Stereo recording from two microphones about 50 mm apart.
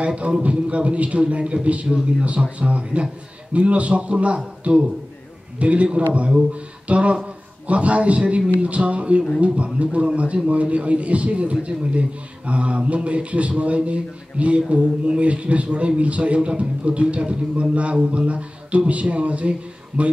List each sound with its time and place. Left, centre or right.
0.0 s a man's voice: right